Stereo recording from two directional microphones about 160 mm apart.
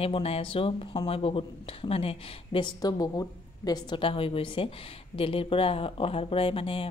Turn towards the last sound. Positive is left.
turn(degrees=35)  # may be behind; listen again after turning